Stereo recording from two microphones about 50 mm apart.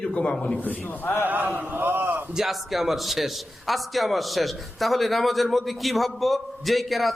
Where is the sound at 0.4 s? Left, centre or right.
Left.